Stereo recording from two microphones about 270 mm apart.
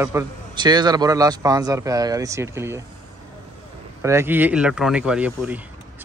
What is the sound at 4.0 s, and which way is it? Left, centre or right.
A man's voice, centre.